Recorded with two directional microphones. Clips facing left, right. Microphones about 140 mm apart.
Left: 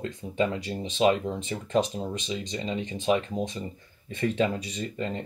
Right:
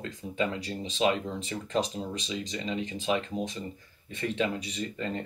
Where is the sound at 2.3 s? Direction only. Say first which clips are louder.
Left 2 dB; 30° left (ahead or behind).